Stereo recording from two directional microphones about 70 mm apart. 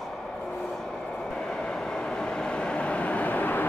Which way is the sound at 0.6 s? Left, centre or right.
Centre.